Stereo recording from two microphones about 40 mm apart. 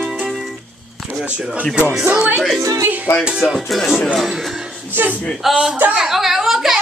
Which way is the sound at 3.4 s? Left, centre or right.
Centre.